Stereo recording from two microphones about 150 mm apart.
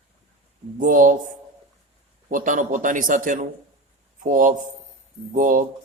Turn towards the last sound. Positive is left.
turn(degrees=-60)  # may be behind; listen again after turning